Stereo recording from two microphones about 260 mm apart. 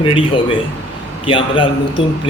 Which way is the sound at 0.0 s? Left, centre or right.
Centre.